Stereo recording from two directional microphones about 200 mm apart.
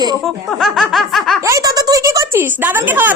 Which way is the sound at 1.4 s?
15° right (ahead or behind).